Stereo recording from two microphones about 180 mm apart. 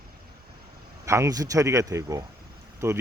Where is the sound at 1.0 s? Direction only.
15° right (ahead or behind).